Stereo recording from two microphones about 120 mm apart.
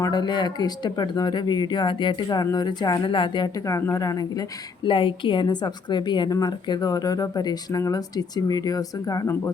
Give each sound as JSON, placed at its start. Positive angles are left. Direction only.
{"t": 0.0, "sound": "a woman's voice", "side_deg": 35}
{"t": 3.8, "sound": "speech", "side_deg": 25}
{"t": 4.9, "sound": "a woman's voice", "side_deg": 45}